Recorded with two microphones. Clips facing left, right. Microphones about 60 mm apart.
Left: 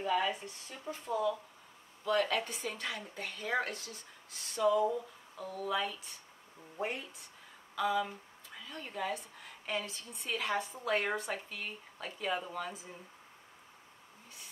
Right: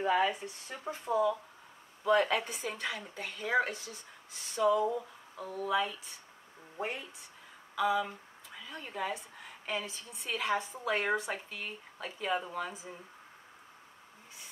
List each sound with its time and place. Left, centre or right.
0.0 s a woman's voice: right; by 12.9 s centre